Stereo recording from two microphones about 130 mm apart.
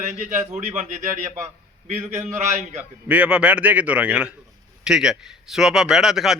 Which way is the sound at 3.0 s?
10° right (ahead or behind).